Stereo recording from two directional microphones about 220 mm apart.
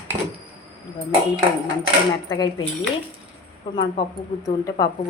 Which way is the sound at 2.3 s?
20° left (ahead or behind).